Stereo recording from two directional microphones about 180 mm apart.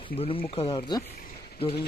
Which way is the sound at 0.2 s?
30° left (ahead or behind).